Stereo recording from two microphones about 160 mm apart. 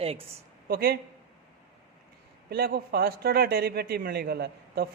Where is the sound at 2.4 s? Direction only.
75° right (ahead or behind).